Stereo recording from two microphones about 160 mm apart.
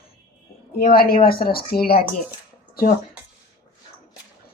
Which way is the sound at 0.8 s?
70° left (ahead or behind).